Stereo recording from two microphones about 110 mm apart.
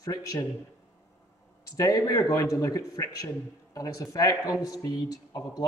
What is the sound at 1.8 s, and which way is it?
Speech, 35° left (ahead or behind).